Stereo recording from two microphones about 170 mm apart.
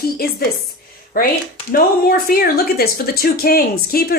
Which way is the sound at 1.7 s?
60° left (ahead or behind).